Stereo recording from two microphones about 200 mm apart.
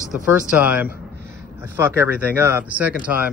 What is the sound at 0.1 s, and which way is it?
Speech, 5° right (ahead or behind).